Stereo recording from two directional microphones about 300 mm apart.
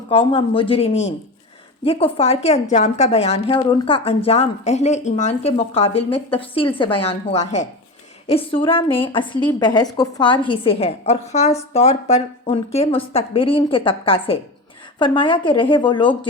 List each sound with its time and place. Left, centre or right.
0.1 s a woman's voice: centre